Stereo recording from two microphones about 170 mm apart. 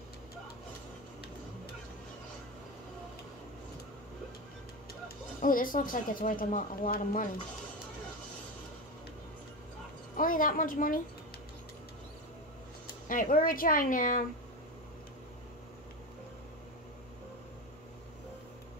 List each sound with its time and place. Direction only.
5.0 s speech: 55° left (ahead or behind)
10.1 s a woman's voice: 55° left (ahead or behind)
12.8 s speech: 55° left (ahead or behind)